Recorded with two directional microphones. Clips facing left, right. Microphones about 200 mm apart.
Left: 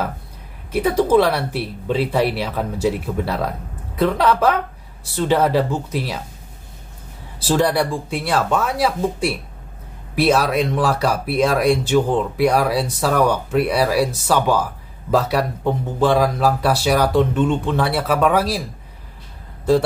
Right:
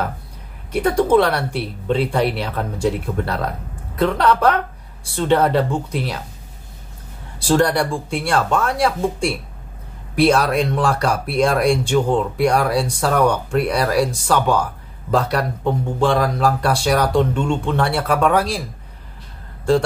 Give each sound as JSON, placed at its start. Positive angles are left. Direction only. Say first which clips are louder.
{"t": 0.7, "sound": "speech", "louder": "even", "side_deg": 5}
{"t": 7.3, "sound": "speech", "louder": "right 1 dB", "side_deg": 5}